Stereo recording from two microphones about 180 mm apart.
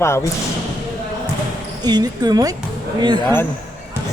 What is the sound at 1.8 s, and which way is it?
Speech, 20° right (ahead or behind).